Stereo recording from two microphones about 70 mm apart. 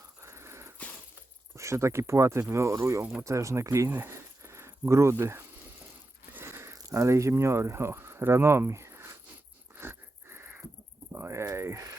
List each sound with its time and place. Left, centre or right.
0.2 s wheeze: right
1.5 s speech: right
6.4 s a sound: right
6.7 s speech: right
9.7 s wheeze: right
11.1 s a sound: right
11.5 s speech: right